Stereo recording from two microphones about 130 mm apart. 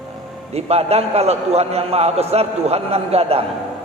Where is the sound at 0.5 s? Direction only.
55° right (ahead or behind).